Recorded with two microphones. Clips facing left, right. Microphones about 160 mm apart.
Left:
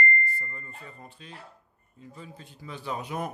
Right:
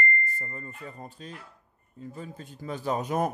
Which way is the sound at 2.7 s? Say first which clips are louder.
Right 6 dB; 45° right (ahead or behind).